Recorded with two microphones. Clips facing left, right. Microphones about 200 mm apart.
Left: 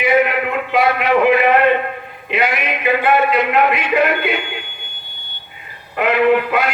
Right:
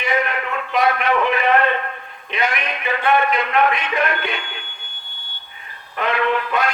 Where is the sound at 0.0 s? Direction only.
10° left (ahead or behind).